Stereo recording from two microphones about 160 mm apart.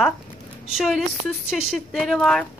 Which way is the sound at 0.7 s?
Centre (ahead or behind).